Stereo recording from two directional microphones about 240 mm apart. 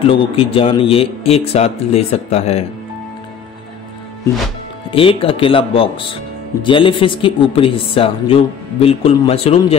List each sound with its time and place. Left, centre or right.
0.1 s speech: left
4.9 s speech: left